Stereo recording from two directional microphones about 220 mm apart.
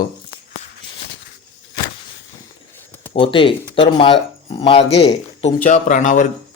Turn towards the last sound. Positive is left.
turn(degrees=35)  # may be behind; listen again after turning